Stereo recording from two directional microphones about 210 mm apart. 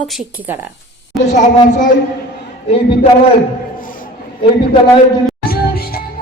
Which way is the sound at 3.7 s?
40° left (ahead or behind).